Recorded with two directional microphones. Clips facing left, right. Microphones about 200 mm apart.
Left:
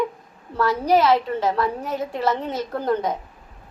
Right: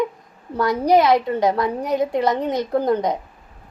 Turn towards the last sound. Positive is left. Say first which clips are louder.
# right 4 dB
turn(degrees=-15)  # may be behind; listen again after turning